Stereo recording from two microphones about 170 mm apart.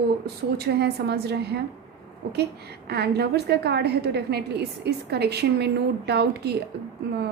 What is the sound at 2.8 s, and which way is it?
A woman's voice, 75° right (ahead or behind).